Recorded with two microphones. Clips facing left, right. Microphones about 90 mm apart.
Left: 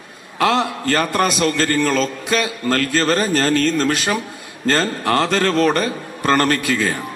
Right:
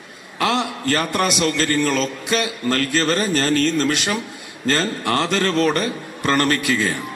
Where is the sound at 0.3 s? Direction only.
35° left (ahead or behind).